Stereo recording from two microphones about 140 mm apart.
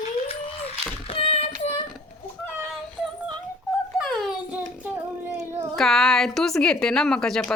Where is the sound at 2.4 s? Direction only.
5° left (ahead or behind).